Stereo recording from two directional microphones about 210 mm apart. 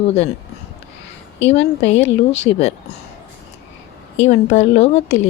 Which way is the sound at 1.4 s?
30° left (ahead or behind).